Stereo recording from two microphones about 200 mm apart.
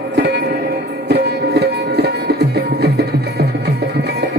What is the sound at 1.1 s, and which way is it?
Music, 55° right (ahead or behind).